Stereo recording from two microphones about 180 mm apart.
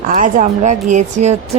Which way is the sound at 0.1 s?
45° right (ahead or behind).